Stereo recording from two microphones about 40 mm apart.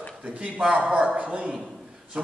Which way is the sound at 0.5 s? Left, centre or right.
Right.